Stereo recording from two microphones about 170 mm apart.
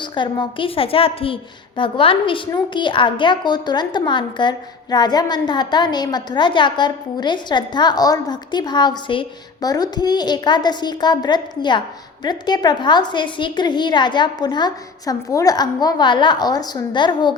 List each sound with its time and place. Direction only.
0.0 s a woman's voice: 30° left (ahead or behind)